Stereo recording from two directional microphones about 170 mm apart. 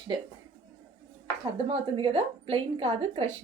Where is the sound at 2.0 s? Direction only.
35° right (ahead or behind).